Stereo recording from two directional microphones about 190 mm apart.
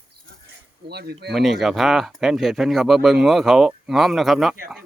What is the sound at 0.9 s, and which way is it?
Speech, 60° right (ahead or behind).